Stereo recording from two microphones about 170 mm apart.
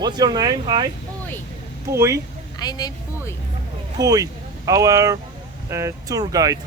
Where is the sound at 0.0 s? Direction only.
25° right (ahead or behind).